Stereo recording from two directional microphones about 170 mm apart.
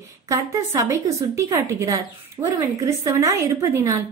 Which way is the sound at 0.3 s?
20° right (ahead or behind).